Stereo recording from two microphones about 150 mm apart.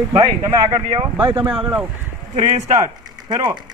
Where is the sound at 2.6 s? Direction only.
25° right (ahead or behind).